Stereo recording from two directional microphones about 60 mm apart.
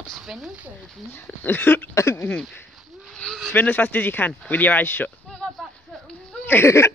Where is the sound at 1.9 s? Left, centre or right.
Left.